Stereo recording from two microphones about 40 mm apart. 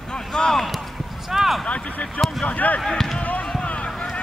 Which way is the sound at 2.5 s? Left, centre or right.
Left.